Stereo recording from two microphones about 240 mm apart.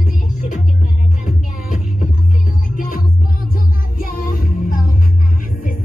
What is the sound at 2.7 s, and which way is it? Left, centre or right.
Music, left.